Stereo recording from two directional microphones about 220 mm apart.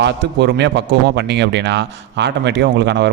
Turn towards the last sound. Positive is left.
turn(degrees=-50)  # may be behind; listen again after turning